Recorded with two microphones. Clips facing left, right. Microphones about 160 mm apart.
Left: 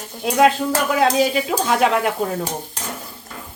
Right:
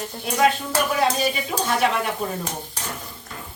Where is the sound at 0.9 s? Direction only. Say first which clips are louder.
Left 6 dB; 90° left.